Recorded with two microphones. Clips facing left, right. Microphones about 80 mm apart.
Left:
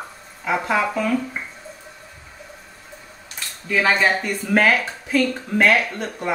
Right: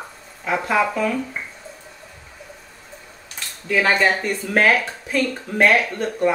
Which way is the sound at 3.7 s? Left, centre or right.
Centre.